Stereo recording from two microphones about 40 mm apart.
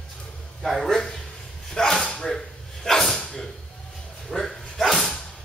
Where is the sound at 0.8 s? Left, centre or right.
Centre.